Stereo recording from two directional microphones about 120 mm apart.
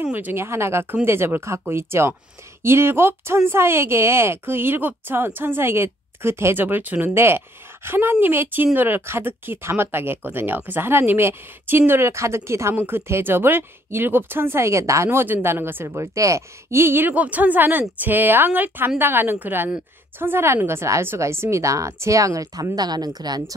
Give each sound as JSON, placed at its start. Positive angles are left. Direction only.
{"t": 0.0, "sound": "speech", "side_deg": -15}